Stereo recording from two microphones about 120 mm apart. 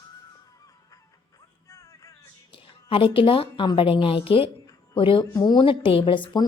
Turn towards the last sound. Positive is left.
turn(degrees=45)  # may be behind; listen again after turning